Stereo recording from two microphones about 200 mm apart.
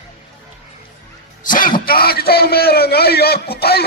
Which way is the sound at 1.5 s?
45° left (ahead or behind).